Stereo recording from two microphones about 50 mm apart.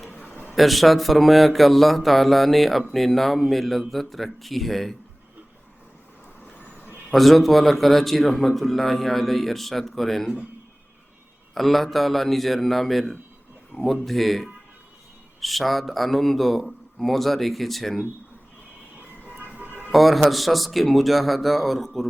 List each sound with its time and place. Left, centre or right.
0.3 s a sound: left
0.5 s speech: centre
7.1 s speech: centre
11.5 s speech: centre
19.9 s speech: centre